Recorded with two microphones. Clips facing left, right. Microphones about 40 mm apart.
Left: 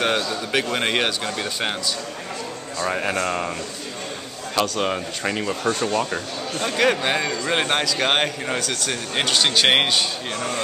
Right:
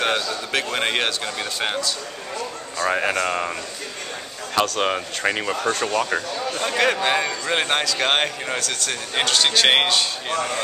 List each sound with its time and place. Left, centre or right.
0.0 s a man's voice: centre
2.8 s speech: centre
4.6 s speech: centre
6.6 s a man's voice: centre